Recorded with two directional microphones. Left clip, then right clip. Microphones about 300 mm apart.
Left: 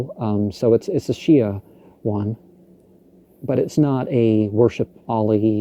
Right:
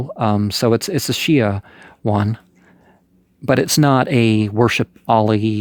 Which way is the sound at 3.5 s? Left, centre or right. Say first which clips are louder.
Right 5 dB; right.